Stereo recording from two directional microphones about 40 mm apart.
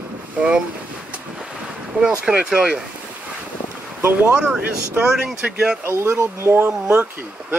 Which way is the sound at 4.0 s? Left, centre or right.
Right.